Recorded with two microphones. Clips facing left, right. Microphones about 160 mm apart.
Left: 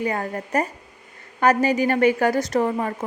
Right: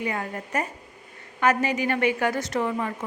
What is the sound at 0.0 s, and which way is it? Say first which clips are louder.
A woman's voice: left 4 dB; 40° left (ahead or behind).